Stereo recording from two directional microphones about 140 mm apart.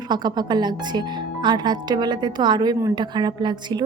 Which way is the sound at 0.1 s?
30° right (ahead or behind).